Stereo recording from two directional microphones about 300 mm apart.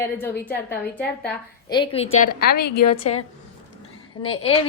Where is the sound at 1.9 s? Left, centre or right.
Centre.